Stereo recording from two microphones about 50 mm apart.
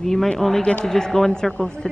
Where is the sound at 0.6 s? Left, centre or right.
Left.